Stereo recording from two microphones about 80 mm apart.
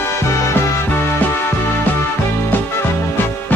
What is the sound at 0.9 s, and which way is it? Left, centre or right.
Music, left.